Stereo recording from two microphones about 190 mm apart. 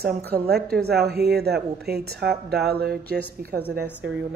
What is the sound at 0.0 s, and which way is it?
A woman's voice, 55° right (ahead or behind).